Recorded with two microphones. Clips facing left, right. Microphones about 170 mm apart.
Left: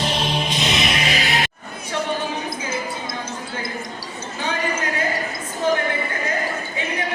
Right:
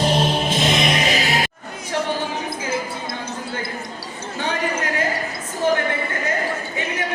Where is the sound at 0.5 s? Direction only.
50° right (ahead or behind).